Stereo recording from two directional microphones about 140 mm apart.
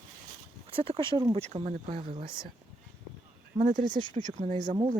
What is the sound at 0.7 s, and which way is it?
Speech, 40° right (ahead or behind).